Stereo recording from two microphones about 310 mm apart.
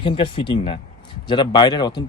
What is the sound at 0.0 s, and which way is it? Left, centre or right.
Speech, centre.